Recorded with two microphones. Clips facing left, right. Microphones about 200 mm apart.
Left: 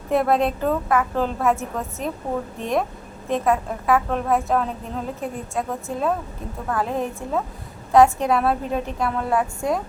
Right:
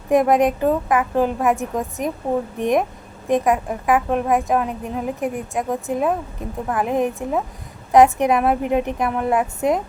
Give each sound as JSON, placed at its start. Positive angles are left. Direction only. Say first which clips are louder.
{"t": 0.1, "sound": "a woman's voice", "louder": "right 4 dB", "side_deg": -15}